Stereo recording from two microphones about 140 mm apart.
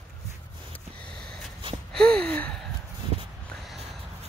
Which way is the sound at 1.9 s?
5° left (ahead or behind).